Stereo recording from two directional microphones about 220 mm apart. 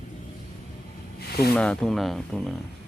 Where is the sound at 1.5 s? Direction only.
5° left (ahead or behind).